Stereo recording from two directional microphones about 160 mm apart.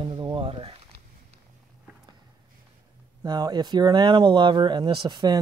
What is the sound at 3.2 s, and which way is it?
Speech, 25° right (ahead or behind).